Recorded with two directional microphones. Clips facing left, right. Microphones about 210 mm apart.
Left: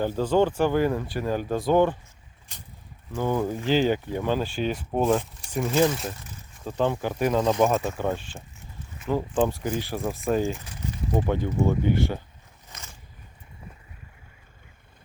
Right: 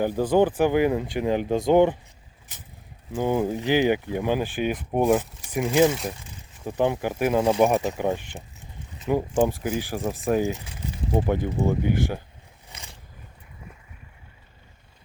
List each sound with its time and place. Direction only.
0.0 s speech: 15° right (ahead or behind)
3.2 s speech: 15° right (ahead or behind)
9.0 s a sound: 15° right (ahead or behind)
9.6 s speech: 10° right (ahead or behind)